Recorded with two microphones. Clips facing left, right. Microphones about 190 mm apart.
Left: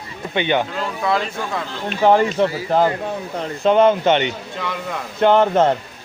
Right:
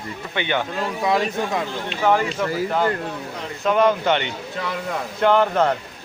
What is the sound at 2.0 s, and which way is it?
Speech, 30° left (ahead or behind).